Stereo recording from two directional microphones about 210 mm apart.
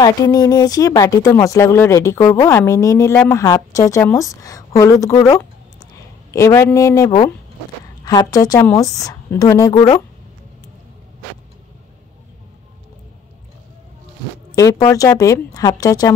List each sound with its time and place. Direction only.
0.0 s speech: 15° left (ahead or behind)
14.9 s speech: 15° left (ahead or behind)